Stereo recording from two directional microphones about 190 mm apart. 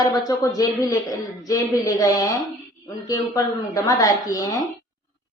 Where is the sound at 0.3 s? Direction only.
20° left (ahead or behind).